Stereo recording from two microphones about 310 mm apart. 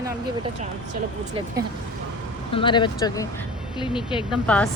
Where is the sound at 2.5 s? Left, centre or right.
Centre.